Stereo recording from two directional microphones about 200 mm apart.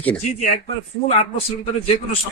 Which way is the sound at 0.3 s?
35° left (ahead or behind).